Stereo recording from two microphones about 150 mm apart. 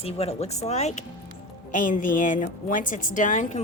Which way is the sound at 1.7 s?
60° left (ahead or behind).